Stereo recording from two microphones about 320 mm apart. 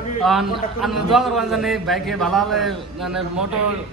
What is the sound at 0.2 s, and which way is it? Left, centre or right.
A man's voice, centre.